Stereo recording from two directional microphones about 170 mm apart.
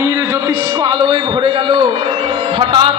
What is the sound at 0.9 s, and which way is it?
A man's voice, 25° right (ahead or behind).